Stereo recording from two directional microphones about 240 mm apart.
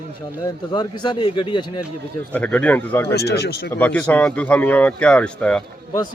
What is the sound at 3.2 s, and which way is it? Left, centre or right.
Speech, left.